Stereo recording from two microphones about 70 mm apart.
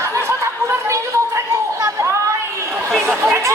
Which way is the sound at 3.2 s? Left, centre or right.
Right.